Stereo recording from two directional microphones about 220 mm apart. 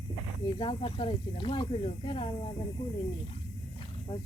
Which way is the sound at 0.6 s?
25° left (ahead or behind).